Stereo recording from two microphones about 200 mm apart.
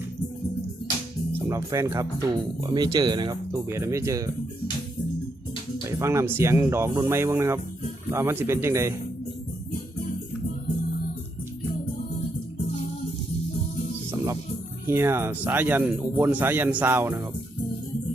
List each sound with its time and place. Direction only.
1.3 s speech: 15° right (ahead or behind)
5.9 s speech: 15° right (ahead or behind)
14.8 s speech: 10° right (ahead or behind)